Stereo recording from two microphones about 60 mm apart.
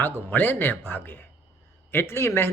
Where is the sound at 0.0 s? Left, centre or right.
Left.